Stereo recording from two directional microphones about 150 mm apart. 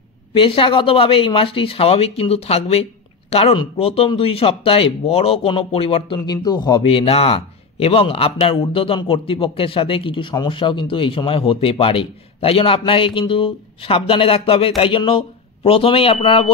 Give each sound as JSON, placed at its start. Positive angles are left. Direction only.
{"t": 0.3, "sound": "a man's voice", "side_deg": 40}
{"t": 6.1, "sound": "speech", "side_deg": 25}
{"t": 6.9, "sound": "a man's voice", "side_deg": 40}